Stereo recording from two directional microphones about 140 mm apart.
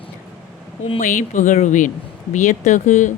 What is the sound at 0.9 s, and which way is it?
Speech, 65° left (ahead or behind).